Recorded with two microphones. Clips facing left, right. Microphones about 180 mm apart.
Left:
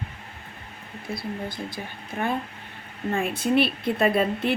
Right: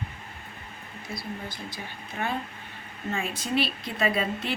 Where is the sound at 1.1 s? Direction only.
55° left (ahead or behind).